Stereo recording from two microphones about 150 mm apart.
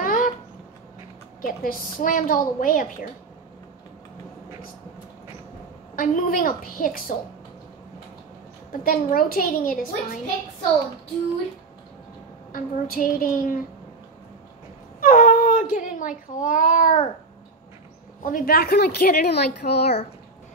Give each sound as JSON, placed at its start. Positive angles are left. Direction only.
{"t": 0.0, "sound": "a sound", "side_deg": 65}
{"t": 1.4, "sound": "a woman's voice", "side_deg": 70}
{"t": 5.9, "sound": "a woman's voice", "side_deg": 65}
{"t": 8.8, "sound": "a woman's voice", "side_deg": 70}
{"t": 12.5, "sound": "a woman's voice", "side_deg": 65}
{"t": 15.0, "sound": "a sound", "side_deg": 65}
{"t": 18.2, "sound": "a woman's voice", "side_deg": 70}